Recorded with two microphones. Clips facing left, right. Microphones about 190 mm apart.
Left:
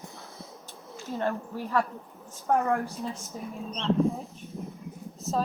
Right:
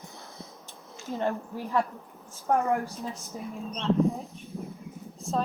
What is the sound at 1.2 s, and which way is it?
Speech, 15° right (ahead or behind).